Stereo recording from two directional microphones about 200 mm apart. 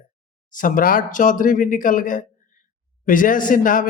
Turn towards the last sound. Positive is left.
turn(degrees=40)  # may be behind; listen again after turning